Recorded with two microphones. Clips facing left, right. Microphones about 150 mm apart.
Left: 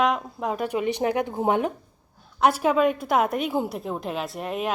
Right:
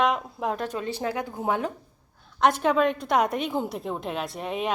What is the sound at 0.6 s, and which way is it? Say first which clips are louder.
A woman's voice: left 5 dB; 15° left (ahead or behind).